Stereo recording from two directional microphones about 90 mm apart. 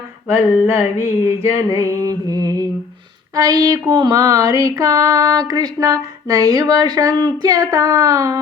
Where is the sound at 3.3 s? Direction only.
45° right (ahead or behind).